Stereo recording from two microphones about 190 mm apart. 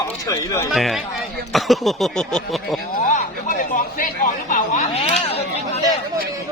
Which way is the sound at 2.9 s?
45° left (ahead or behind).